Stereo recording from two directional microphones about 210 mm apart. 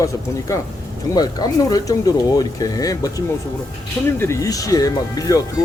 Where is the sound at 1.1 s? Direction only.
20° left (ahead or behind).